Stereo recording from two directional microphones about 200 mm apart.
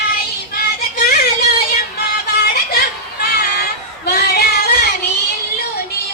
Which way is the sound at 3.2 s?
50° left (ahead or behind).